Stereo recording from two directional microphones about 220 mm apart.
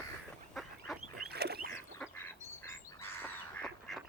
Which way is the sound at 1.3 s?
45° right (ahead or behind).